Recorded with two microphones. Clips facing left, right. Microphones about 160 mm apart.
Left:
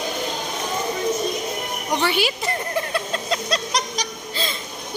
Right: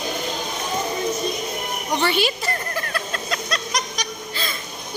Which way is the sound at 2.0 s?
10° left (ahead or behind).